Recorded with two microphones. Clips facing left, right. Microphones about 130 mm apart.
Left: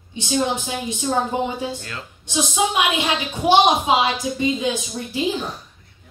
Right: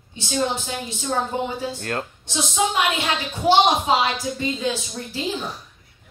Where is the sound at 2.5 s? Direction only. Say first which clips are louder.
Even; 5° left (ahead or behind).